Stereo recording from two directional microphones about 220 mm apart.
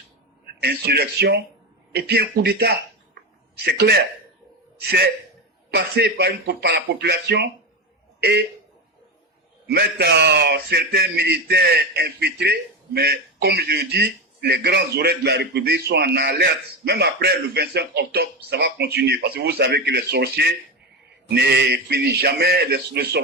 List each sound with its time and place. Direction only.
0.6 s a man's voice: 45° right (ahead or behind)
9.6 s a man's voice: 45° right (ahead or behind)